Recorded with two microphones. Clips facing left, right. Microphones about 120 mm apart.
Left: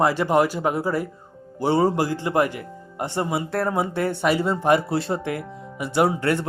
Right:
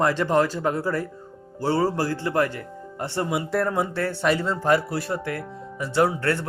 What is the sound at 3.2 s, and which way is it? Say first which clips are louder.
Speech: right 3 dB; centre (ahead or behind).